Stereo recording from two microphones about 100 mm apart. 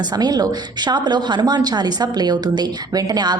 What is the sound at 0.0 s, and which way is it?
A woman's voice, 45° right (ahead or behind).